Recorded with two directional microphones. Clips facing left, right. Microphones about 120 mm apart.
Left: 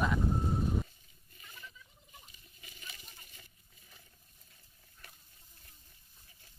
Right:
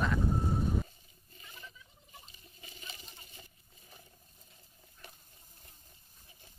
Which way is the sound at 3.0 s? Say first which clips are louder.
Right 3 dB; 25° right (ahead or behind).